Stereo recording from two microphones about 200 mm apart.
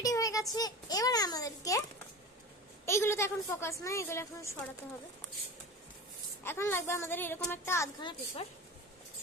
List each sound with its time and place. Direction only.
0.0 s a sound: 15° left (ahead or behind)
2.8 s a woman's voice: 10° left (ahead or behind)
6.4 s a woman's voice: 10° left (ahead or behind)